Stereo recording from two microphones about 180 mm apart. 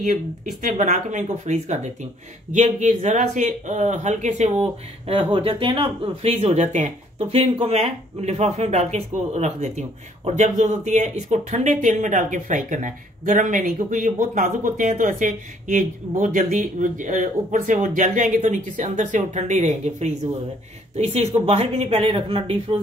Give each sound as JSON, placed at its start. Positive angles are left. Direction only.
{"t": 0.6, "sound": "speech", "side_deg": -40}